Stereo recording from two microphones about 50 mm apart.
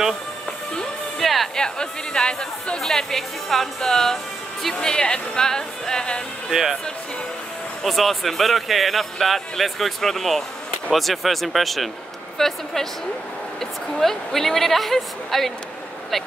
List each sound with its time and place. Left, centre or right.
1.2 s speech: centre
1.5 s speech: centre
6.5 s speech: centre
7.8 s speech: centre